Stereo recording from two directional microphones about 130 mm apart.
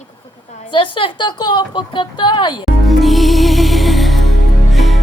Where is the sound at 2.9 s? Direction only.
Centre (ahead or behind).